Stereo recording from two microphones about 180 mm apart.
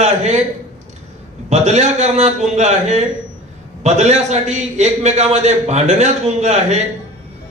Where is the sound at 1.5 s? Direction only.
40° right (ahead or behind).